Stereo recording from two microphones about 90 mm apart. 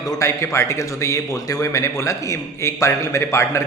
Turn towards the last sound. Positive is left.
turn(degrees=35)  # may be behind; listen again after turning